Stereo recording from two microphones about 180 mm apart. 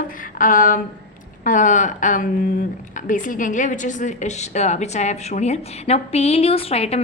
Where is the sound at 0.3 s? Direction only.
50° left (ahead or behind).